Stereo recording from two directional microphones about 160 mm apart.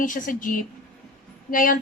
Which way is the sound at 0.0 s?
55° left (ahead or behind).